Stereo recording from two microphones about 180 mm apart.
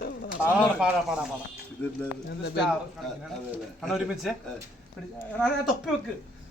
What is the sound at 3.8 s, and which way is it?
Speech, centre (ahead or behind).